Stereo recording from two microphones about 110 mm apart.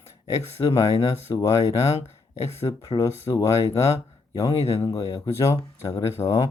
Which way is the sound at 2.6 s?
30° left (ahead or behind).